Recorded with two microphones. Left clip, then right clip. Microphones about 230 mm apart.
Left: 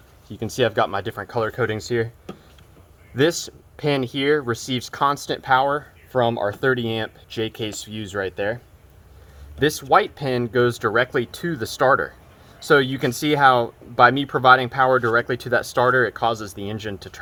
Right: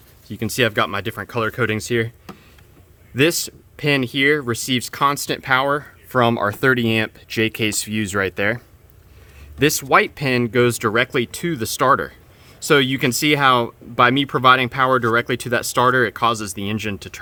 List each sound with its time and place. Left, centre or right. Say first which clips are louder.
0.3 s speech: right 2 dB; right
1.1 s speech: right 1 dB; right
3.2 s speech: right 2 dB; right